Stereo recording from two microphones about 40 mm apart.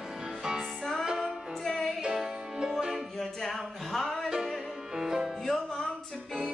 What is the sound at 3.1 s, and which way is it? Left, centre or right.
Music, centre.